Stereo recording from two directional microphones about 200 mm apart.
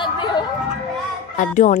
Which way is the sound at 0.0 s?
20° left (ahead or behind).